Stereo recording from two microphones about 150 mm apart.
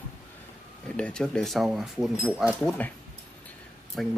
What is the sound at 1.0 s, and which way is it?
Speech, 5° left (ahead or behind).